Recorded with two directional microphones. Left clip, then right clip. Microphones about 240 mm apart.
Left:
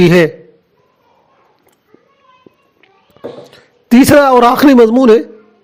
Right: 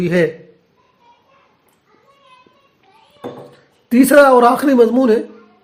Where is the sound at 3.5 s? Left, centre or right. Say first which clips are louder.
Left 5 dB; left.